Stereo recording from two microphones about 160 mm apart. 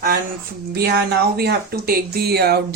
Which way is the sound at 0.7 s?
85° right.